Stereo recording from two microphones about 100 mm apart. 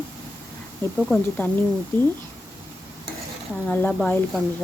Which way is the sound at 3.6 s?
20° left (ahead or behind).